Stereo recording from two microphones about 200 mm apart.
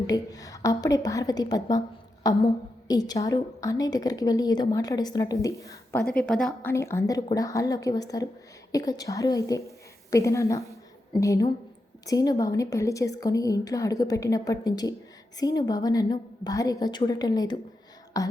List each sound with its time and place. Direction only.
0.1 s a woman's voice: 15° left (ahead or behind)